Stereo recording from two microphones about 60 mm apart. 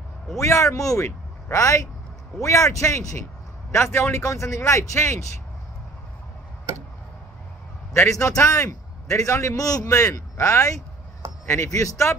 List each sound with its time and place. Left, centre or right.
0.4 s a man's voice: left
3.7 s speech: left
7.9 s a man's voice: left
9.7 s a man's voice: left